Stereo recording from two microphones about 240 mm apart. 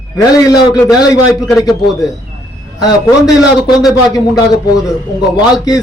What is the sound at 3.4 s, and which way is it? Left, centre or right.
A man's voice, centre.